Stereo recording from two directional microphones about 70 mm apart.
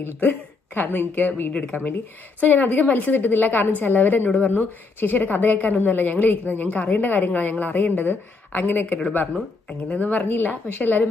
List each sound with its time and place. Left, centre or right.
0.2 s a woman's voice: left
1.5 s a woman's voice: centre
9.3 s a woman's voice: centre
9.9 s a woman's voice: left